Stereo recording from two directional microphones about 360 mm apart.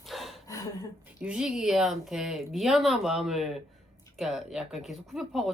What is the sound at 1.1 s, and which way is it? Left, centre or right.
Speech, centre.